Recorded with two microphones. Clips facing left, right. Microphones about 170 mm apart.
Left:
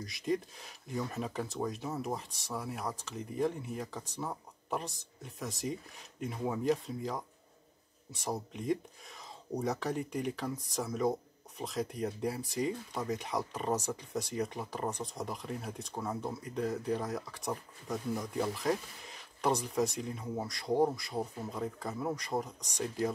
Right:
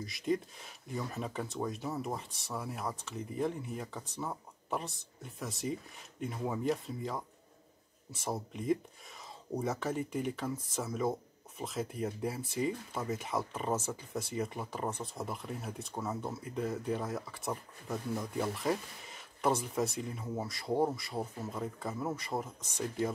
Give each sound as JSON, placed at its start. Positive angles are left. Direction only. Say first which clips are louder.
{"t": 0.0, "sound": "speech", "louder": "even", "side_deg": 0}